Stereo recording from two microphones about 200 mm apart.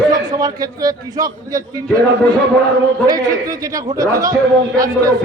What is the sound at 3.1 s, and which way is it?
A man's voice, 15° right (ahead or behind).